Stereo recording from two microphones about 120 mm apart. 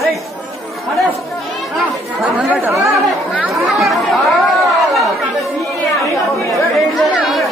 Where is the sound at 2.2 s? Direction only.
5° right (ahead or behind).